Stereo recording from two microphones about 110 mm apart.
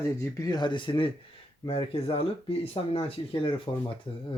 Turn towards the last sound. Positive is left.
turn(degrees=55)  # may be behind; listen again after turning